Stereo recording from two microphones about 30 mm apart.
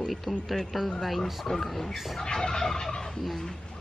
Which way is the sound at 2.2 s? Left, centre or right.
Left.